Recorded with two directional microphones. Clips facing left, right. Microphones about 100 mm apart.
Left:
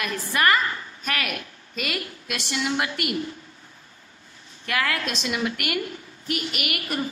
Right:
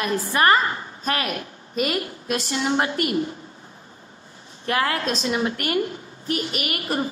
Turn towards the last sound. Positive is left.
turn(degrees=-30)  # may be behind; listen again after turning